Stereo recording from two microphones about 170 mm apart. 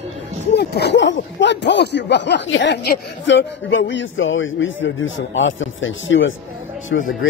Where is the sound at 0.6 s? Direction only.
80° left.